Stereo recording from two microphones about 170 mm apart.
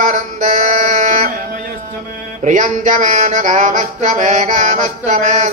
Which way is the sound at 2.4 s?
50° right (ahead or behind).